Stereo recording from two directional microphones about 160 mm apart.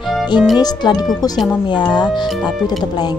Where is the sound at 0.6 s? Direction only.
25° left (ahead or behind).